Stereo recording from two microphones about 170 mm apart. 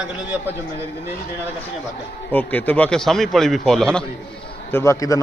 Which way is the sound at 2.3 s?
10° left (ahead or behind).